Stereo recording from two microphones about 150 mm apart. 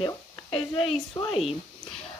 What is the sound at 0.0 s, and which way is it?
Speech, 35° left (ahead or behind).